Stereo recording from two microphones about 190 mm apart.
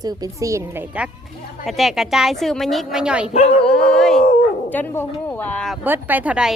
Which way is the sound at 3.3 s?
35° left (ahead or behind).